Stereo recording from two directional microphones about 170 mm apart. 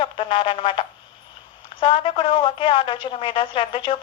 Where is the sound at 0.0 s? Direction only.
30° left (ahead or behind).